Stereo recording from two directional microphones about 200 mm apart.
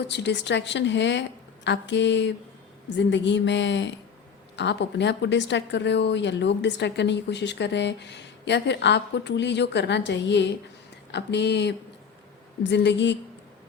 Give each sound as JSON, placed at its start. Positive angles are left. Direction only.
{"t": 0.0, "sound": "speech", "side_deg": 60}